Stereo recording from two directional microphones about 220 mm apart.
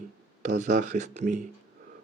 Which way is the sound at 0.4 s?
35° right (ahead or behind).